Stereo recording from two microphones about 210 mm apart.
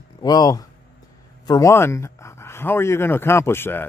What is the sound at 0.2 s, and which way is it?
Speech, 20° left (ahead or behind).